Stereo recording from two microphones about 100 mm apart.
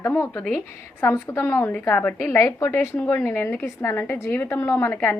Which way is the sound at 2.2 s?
30° left (ahead or behind).